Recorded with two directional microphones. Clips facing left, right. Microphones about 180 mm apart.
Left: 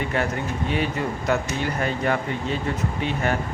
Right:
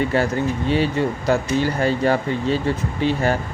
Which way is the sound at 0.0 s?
30° right (ahead or behind).